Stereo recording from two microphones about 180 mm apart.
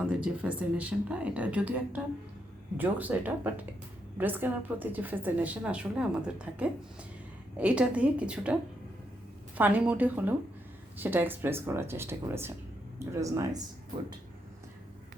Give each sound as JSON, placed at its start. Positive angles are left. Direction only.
{"t": 0.1, "sound": "a woman's voice", "side_deg": -5}
{"t": 9.6, "sound": "a woman's voice", "side_deg": -10}